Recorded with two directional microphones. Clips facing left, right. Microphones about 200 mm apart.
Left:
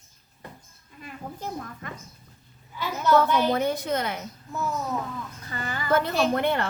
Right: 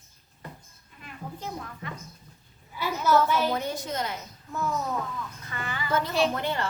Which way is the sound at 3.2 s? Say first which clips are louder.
Left 3 dB; 60° left (ahead or behind).